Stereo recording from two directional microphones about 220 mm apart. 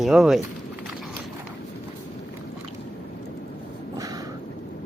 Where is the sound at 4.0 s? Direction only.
15° right (ahead or behind).